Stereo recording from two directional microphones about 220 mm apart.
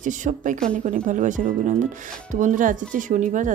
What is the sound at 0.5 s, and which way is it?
Speech, 5° left (ahead or behind).